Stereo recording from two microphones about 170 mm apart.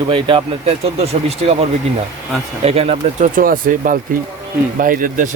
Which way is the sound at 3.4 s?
55° right (ahead or behind).